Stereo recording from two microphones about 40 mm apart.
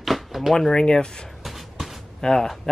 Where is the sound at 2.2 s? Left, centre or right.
Centre.